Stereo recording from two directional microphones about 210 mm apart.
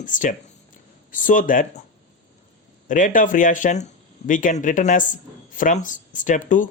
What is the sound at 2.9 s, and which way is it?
Speech, 40° left (ahead or behind).